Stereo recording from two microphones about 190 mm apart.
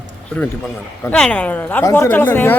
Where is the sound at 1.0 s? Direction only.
5° left (ahead or behind).